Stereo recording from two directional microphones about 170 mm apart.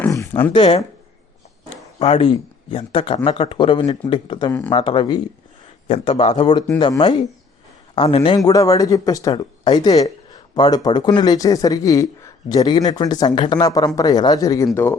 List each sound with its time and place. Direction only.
0.0 s speech: 15° left (ahead or behind)
0.5 s speech: 30° left (ahead or behind)
2.0 s speech: 35° left (ahead or behind)
8.4 s speech: 20° left (ahead or behind)